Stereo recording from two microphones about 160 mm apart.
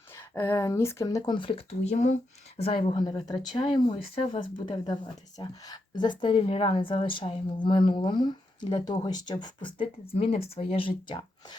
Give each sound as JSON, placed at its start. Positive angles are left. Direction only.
{"t": 0.1, "sound": "speech", "side_deg": 15}
{"t": 2.9, "sound": "a woman's voice", "side_deg": 25}